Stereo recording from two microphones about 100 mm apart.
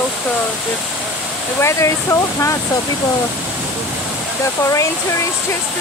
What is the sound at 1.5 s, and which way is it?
Speech, 30° left (ahead or behind).